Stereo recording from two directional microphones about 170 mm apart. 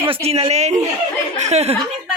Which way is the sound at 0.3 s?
35° right (ahead or behind).